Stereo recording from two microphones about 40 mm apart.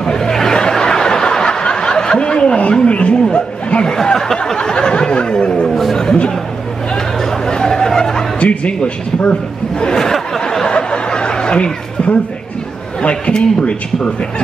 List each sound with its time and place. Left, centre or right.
0.0 s a sound: centre
5.7 s chatter: centre
7.2 s chatter: centre
8.4 s speech: left
9.9 s a sound: centre
10.7 s snicker: left
13.0 s speech: left